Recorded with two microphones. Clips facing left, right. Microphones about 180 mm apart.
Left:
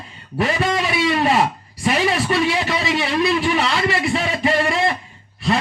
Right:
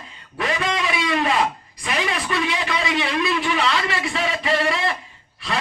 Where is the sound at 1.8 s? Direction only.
30° left (ahead or behind).